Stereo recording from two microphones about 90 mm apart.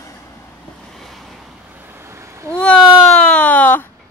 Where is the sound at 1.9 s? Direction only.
30° right (ahead or behind).